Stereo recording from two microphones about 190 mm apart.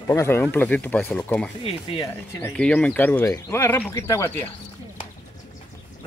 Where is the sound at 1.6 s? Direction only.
30° left (ahead or behind).